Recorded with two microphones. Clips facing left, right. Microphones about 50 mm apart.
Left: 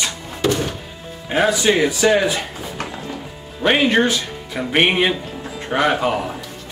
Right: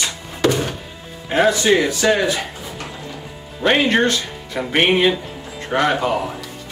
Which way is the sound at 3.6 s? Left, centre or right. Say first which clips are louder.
Even; centre.